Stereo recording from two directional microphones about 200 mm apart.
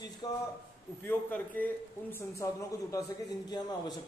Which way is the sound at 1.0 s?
10° left (ahead or behind).